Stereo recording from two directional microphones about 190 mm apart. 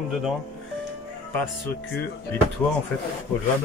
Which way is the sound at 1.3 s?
10° left (ahead or behind).